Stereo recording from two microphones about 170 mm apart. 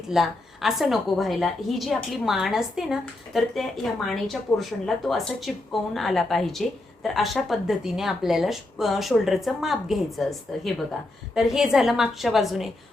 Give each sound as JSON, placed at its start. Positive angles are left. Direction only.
{"t": 0.1, "sound": "a woman's voice", "side_deg": 0}